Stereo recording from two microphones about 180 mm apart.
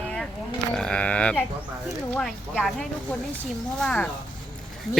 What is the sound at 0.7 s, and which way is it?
Speech, 5° left (ahead or behind).